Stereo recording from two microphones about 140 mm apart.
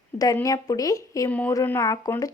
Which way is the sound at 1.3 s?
10° left (ahead or behind).